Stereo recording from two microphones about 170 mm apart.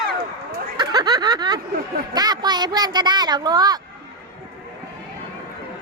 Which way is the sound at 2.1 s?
25° right (ahead or behind).